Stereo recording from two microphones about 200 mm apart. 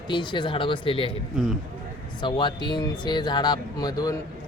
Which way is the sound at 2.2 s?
25° left (ahead or behind).